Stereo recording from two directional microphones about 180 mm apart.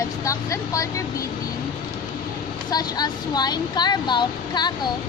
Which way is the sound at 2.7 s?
20° left (ahead or behind).